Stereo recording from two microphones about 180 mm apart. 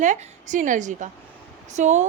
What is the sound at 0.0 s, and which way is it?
A woman's voice, 45° right (ahead or behind).